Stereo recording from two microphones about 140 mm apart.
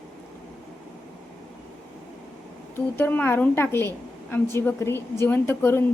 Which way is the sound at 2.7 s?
15° left (ahead or behind).